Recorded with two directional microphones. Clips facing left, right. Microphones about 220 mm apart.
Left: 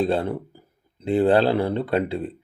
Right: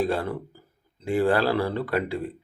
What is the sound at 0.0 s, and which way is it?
Speech, 25° left (ahead or behind).